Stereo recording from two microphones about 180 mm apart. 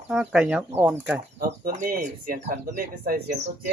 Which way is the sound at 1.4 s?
50° right (ahead or behind).